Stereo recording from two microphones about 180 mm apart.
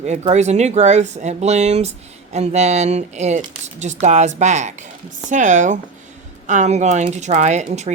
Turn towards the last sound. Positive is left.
turn(degrees=-40)  # may be behind; listen again after turning